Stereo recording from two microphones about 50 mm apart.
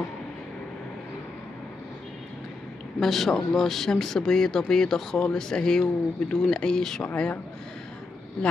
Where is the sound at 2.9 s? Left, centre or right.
Centre.